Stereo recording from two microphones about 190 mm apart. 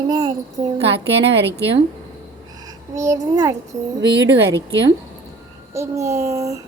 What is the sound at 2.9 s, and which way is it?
Child singing, 15° right (ahead or behind).